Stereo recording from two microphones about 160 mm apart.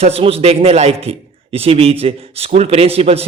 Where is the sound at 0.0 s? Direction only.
40° right (ahead or behind).